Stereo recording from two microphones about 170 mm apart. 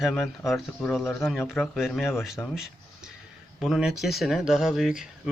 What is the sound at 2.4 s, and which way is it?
Speech, 10° left (ahead or behind).